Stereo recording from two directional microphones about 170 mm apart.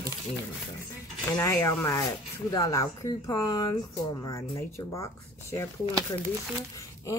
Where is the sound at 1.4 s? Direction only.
15° left (ahead or behind).